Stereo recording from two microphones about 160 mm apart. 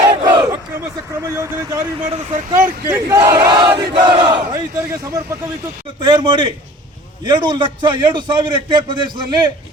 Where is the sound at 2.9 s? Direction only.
20° right (ahead or behind).